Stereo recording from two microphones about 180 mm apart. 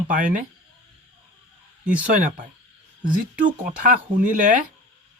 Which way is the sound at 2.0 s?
50° right (ahead or behind).